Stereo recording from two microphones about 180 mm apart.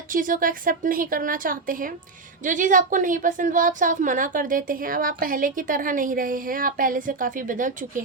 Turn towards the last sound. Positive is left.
turn(degrees=-45)  # may be behind; listen again after turning